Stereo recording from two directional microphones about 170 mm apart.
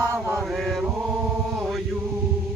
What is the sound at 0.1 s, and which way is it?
Chant, 15° right (ahead or behind).